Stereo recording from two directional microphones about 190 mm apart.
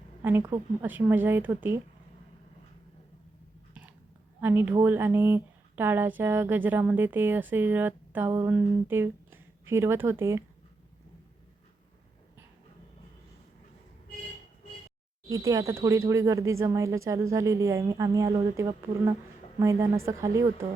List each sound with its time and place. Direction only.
0.2 s speech: 10° right (ahead or behind)
4.4 s speech: 10° right (ahead or behind)
15.3 s speech: 15° right (ahead or behind)